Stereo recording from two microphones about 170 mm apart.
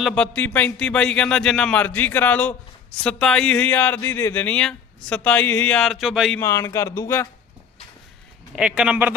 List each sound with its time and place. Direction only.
0.0 s a man's voice: 5° left (ahead or behind)
6.3 s a man's voice: 15° left (ahead or behind)
8.5 s speech: 5° right (ahead or behind)